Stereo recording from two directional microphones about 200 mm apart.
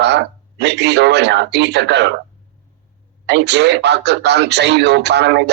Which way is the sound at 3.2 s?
60° right (ahead or behind).